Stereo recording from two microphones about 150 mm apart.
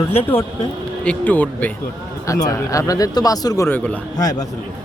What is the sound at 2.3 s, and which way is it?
Speech, 20° left (ahead or behind).